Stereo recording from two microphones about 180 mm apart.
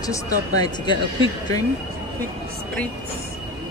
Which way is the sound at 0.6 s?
25° left (ahead or behind).